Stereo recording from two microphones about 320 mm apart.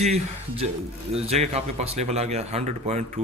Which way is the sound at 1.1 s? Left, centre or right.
Centre.